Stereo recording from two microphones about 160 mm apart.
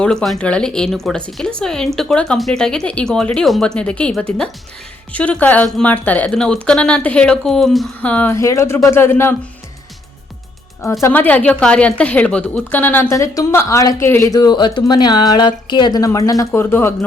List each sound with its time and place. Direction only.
0.0 s a woman's voice: 5° left (ahead or behind)
11.0 s a woman's voice: 10° left (ahead or behind)